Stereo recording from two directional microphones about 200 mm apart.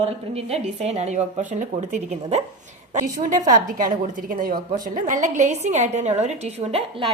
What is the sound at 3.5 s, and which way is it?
A woman's voice, 40° right (ahead or behind).